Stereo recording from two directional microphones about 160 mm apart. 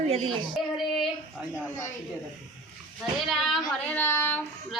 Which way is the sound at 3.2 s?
Centre (ahead or behind).